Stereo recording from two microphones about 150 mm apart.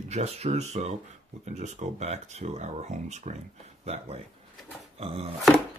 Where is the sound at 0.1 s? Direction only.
45° right (ahead or behind).